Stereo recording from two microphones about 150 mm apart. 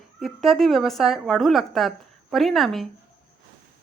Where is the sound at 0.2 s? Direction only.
Centre (ahead or behind).